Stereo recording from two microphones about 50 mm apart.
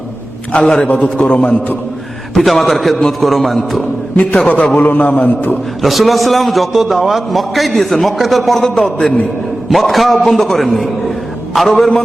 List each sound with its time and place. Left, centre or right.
0.6 s a man's voice: centre
0.9 s a man's voice: centre
2.4 s a man's voice: centre
4.4 s a man's voice: left
5.8 s a man's voice: centre